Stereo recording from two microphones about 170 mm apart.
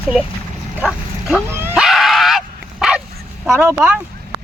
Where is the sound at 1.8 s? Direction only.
Centre (ahead or behind).